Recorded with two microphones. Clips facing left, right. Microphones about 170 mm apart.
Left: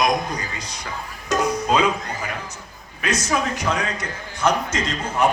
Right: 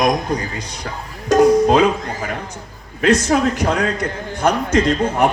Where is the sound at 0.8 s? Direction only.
55° right (ahead or behind).